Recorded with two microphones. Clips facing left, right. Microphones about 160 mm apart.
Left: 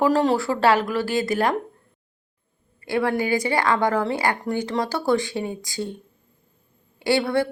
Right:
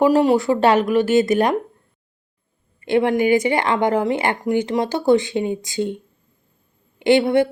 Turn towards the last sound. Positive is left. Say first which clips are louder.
# right 6 dB
turn(degrees=-20)  # may be behind; listen again after turning